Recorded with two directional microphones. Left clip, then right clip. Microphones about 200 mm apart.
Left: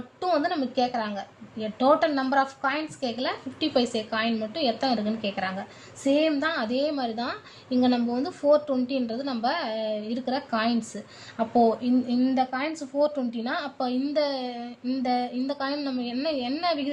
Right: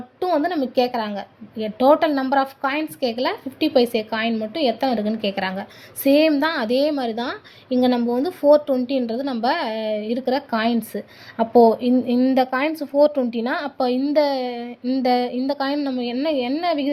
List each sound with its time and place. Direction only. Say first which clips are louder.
0.2 s a woman's voice: right 4 dB; 30° right (ahead or behind)